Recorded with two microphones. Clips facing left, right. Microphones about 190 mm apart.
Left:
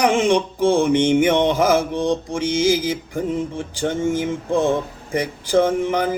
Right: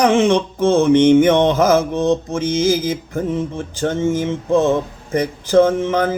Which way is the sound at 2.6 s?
55° right (ahead or behind).